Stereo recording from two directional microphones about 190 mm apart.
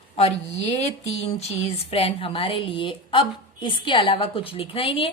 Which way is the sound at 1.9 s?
30° left (ahead or behind).